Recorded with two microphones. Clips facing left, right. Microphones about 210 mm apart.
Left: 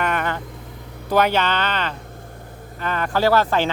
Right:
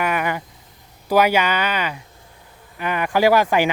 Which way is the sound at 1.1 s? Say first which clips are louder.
Right 2 dB; 10° right (ahead or behind).